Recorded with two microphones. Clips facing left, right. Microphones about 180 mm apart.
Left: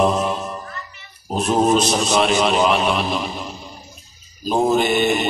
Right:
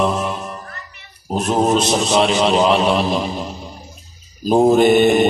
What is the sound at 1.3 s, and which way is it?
Mantra, 25° right (ahead or behind).